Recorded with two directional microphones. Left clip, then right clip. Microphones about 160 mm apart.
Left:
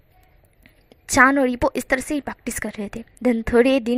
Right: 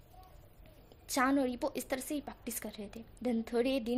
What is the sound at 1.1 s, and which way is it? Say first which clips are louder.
A woman's voice: left 16 dB; 35° left (ahead or behind).